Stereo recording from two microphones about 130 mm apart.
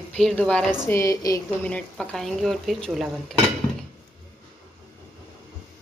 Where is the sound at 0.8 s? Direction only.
20° left (ahead or behind).